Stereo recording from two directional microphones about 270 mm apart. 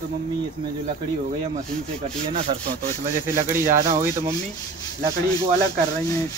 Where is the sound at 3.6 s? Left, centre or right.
Right.